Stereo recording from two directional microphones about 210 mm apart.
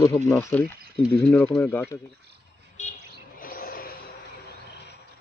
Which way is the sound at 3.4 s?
45° left (ahead or behind).